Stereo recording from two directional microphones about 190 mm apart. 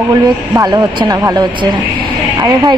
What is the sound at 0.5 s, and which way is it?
Speech, 20° right (ahead or behind).